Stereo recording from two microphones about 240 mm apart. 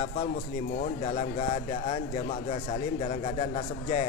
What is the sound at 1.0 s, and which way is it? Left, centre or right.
A man's voice, left.